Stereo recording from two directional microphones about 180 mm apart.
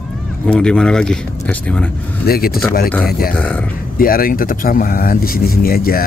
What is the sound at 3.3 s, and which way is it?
Speech, 10° left (ahead or behind).